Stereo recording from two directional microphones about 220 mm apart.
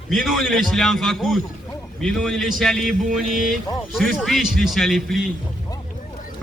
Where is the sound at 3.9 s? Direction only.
Centre (ahead or behind).